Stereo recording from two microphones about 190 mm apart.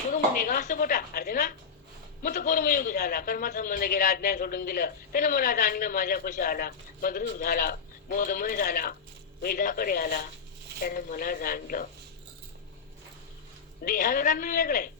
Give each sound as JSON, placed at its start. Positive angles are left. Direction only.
{"t": 0.1, "sound": "a man's voice", "side_deg": 45}
{"t": 13.8, "sound": "a man's voice", "side_deg": 45}